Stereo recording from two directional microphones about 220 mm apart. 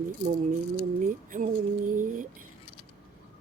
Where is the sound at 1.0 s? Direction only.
35° right (ahead or behind).